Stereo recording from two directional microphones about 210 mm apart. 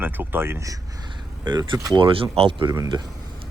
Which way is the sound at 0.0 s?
10° right (ahead or behind).